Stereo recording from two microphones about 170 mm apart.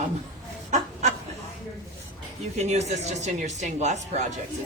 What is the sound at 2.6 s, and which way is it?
Speech, 40° right (ahead or behind).